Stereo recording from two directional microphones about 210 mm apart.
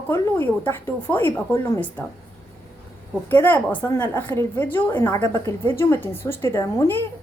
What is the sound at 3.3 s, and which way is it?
A woman's voice, 10° left (ahead or behind).